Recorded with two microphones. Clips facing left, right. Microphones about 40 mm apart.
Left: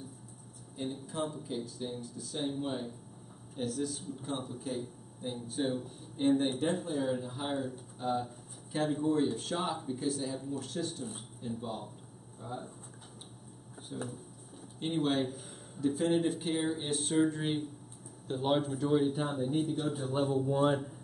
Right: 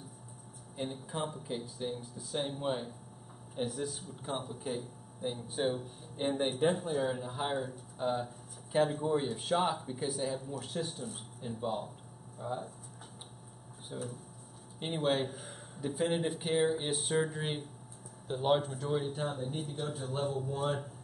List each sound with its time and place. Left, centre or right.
0.7 s speech: centre
13.9 s a man's voice: centre